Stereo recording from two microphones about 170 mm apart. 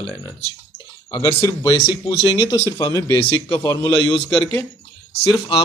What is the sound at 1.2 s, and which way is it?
Speech, 20° left (ahead or behind).